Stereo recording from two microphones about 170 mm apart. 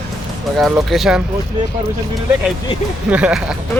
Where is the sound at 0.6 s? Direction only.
Centre (ahead or behind).